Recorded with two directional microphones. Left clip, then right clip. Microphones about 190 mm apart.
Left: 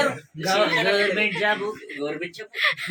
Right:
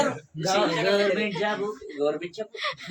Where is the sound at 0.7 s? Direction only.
10° right (ahead or behind).